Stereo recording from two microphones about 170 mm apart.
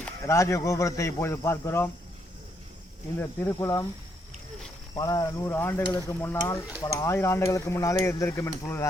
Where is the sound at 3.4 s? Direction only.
20° left (ahead or behind).